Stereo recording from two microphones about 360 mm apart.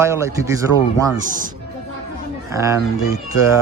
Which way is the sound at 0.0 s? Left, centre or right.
Centre.